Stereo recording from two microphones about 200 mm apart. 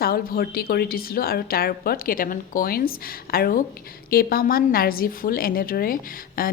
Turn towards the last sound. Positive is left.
turn(degrees=45)  # may be behind; listen again after turning